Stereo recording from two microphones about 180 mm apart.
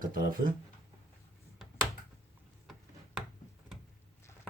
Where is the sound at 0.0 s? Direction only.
50° right (ahead or behind).